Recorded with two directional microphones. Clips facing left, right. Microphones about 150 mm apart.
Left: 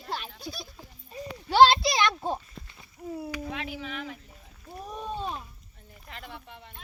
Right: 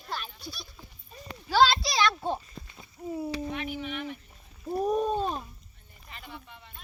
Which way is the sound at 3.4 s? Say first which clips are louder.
Right 2 dB; 90° left.